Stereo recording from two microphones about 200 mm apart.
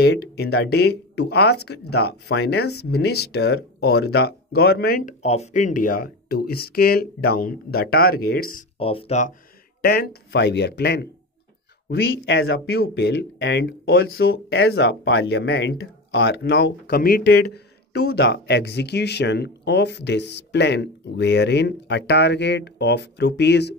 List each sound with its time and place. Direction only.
0.0 s speech: 55° left (ahead or behind)
5.2 s speech: 35° left (ahead or behind)
8.7 s speech: 30° left (ahead or behind)
9.8 s speech: 50° left (ahead or behind)